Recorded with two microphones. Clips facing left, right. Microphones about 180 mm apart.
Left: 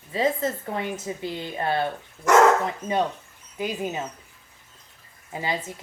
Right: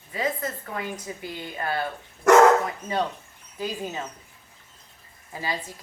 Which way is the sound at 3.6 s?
20° left (ahead or behind).